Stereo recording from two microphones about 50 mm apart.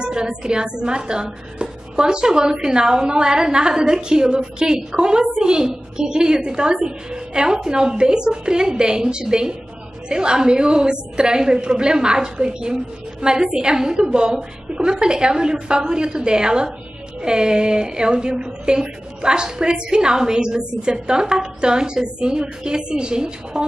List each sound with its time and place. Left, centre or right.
0.0 s a woman's voice: centre